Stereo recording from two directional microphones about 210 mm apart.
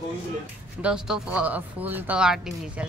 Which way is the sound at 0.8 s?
5° right (ahead or behind).